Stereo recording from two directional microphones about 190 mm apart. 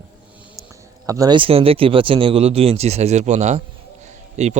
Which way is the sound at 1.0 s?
20° right (ahead or behind).